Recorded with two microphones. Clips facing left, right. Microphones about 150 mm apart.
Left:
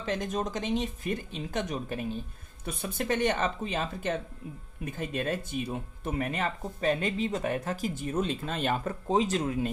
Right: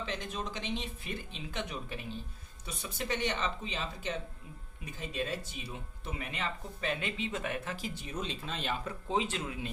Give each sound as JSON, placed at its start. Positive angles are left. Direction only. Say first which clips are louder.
{"t": 0.0, "sound": "speech", "louder": "left 7 dB", "side_deg": 45}